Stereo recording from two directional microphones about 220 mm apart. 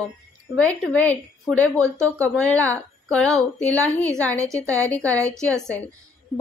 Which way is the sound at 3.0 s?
5° left (ahead or behind).